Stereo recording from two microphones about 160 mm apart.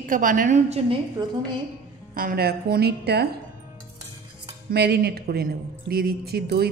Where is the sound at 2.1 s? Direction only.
70° right (ahead or behind); by 3.2 s 90° right.